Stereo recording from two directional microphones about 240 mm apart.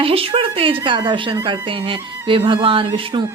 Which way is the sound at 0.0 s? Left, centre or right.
Right.